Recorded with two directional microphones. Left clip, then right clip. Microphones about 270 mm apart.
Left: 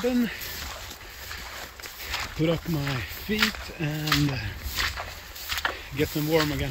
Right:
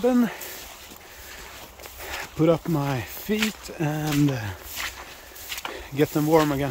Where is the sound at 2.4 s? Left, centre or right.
Centre.